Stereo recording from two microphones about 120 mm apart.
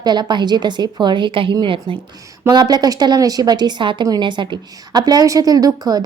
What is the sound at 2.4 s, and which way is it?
Speech, 35° right (ahead or behind).